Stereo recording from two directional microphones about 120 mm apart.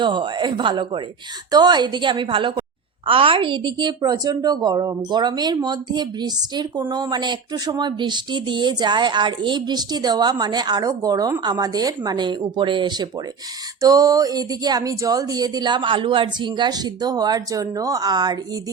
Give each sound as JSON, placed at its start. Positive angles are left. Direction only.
{"t": 0.0, "sound": "a woman's voice", "side_deg": -40}